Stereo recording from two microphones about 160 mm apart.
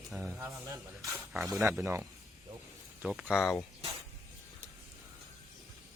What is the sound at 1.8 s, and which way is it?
Speech, 15° right (ahead or behind).